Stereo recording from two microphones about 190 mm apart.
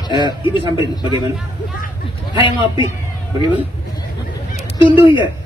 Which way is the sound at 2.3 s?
25° left (ahead or behind).